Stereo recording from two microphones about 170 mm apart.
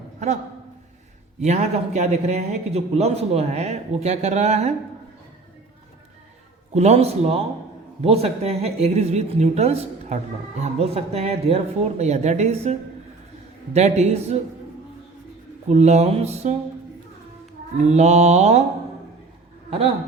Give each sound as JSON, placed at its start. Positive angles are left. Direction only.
{"t": 1.4, "sound": "a man's voice", "side_deg": -40}
{"t": 6.7, "sound": "a man's voice", "side_deg": -40}
{"t": 13.7, "sound": "a man's voice", "side_deg": -40}
{"t": 15.7, "sound": "a man's voice", "side_deg": -40}
{"t": 17.7, "sound": "a man's voice", "side_deg": -40}